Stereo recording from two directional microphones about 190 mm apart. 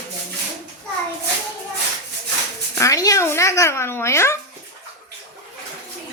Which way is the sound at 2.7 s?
15° left (ahead or behind).